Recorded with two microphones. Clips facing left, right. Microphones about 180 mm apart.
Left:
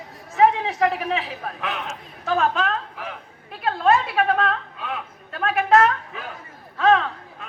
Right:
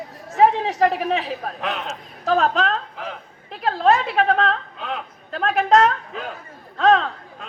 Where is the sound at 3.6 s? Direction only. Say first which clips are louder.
Right 1 dB; 35° right (ahead or behind).